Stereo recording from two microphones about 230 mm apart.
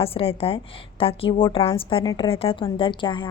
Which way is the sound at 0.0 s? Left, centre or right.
Left.